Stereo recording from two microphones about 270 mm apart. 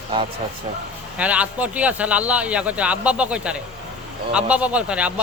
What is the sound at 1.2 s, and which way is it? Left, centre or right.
Speech, centre.